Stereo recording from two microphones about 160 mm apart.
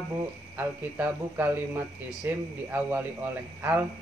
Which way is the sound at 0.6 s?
10° right (ahead or behind).